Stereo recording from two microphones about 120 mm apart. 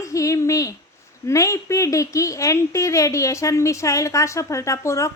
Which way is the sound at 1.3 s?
25° left (ahead or behind).